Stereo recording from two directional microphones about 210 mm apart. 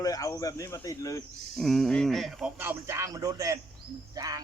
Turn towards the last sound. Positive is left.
turn(degrees=-15)  # may be behind; listen again after turning